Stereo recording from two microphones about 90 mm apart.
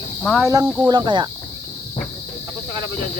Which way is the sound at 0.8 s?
60° right (ahead or behind).